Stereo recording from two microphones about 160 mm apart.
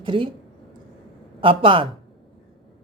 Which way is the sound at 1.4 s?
35° right (ahead or behind).